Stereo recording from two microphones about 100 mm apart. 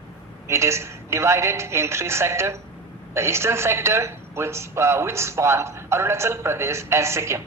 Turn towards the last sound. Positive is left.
turn(degrees=-25)  # may be behind; listen again after turning